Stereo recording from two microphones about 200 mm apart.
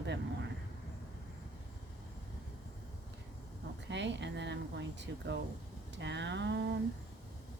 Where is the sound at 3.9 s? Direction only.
65° right (ahead or behind).